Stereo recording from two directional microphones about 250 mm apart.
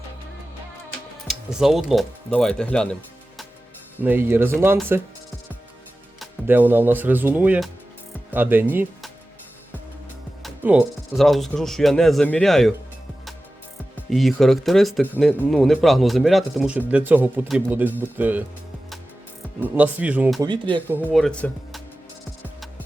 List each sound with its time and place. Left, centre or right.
1.3 s speech: centre
4.0 s speech: centre
6.1 s speech: centre
10.4 s speech: centre
13.9 s speech: centre
19.5 s speech: centre
20.5 s speech: centre
20.8 s speech: centre